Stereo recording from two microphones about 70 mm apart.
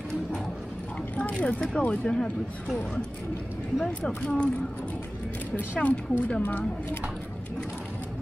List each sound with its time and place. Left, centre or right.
1.1 s speech: centre
3.7 s speech: centre
5.6 s speech: left